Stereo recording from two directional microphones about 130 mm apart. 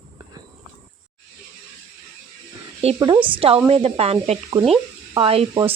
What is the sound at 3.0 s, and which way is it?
A woman's voice, 40° right (ahead or behind).